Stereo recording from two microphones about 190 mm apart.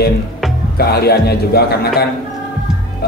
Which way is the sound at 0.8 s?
55° left (ahead or behind).